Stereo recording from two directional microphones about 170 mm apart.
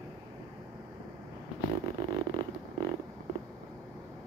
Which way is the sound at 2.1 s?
30° right (ahead or behind).